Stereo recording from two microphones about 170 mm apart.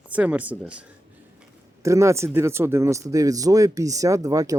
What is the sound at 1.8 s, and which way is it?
Speech, 15° right (ahead or behind).